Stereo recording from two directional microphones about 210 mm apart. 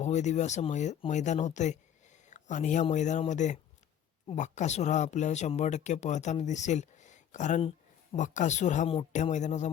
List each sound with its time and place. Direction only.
0.0 s speech: 35° left (ahead or behind)